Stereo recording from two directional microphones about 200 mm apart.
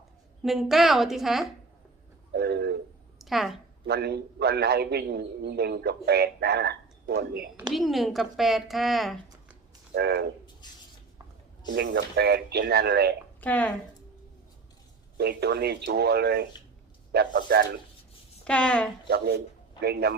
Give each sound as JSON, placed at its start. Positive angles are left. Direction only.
{"t": 0.4, "sound": "a woman's voice", "side_deg": 0}
{"t": 2.3, "sound": "a sound", "side_deg": -55}
{"t": 3.2, "sound": "a woman's voice", "side_deg": 0}
{"t": 3.8, "sound": "a man's voice", "side_deg": -55}
{"t": 7.7, "sound": "a woman's voice", "side_deg": 0}
{"t": 9.9, "sound": "a sound", "side_deg": -55}
{"t": 11.7, "sound": "a man's voice", "side_deg": -55}
{"t": 13.4, "sound": "speech", "side_deg": 5}
{"t": 15.2, "sound": "a man's voice", "side_deg": -55}
{"t": 18.4, "sound": "a woman's voice", "side_deg": 5}
{"t": 19.0, "sound": "a man's voice", "side_deg": -55}